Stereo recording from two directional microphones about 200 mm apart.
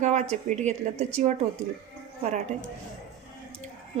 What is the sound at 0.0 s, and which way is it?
A woman's voice, 35° right (ahead or behind).